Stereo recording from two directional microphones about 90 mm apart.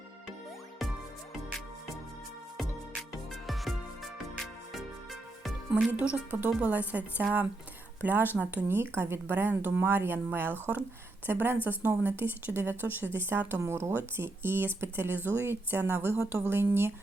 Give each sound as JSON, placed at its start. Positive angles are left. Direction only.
{"t": 3.4, "sound": "music", "side_deg": 0}
{"t": 5.7, "sound": "speech", "side_deg": -15}